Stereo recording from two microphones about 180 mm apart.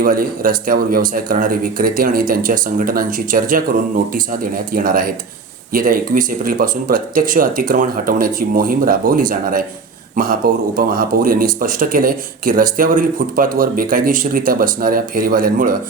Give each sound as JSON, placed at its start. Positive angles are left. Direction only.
{"t": 0.0, "sound": "speech", "side_deg": -50}